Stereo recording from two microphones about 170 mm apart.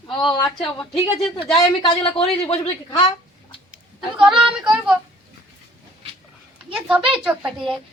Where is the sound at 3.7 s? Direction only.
5° right (ahead or behind).